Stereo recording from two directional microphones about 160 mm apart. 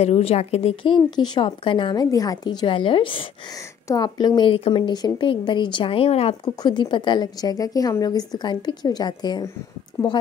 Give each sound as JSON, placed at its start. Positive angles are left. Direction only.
{"t": 0.0, "sound": "speech", "side_deg": 40}
{"t": 6.4, "sound": "a woman's voice", "side_deg": 25}